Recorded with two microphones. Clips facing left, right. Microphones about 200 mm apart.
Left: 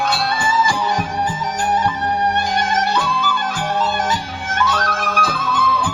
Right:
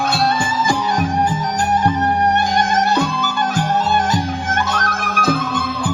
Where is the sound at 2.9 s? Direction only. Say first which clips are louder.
Right 2 dB; 45° right (ahead or behind).